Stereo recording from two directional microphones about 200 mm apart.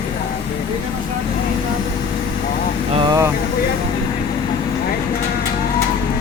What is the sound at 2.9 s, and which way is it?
Speech, 20° right (ahead or behind).